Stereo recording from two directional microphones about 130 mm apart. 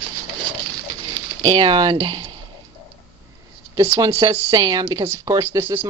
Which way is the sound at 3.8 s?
25° right (ahead or behind).